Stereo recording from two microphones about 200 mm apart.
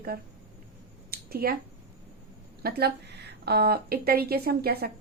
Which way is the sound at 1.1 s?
50° right (ahead or behind).